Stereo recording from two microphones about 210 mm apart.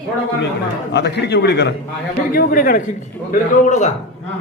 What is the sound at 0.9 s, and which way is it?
A man's voice, 55° left (ahead or behind).